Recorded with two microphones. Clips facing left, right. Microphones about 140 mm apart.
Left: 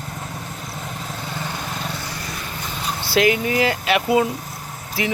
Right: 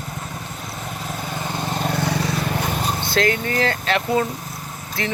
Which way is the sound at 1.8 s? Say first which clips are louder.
Right 8 dB; 60° right (ahead or behind).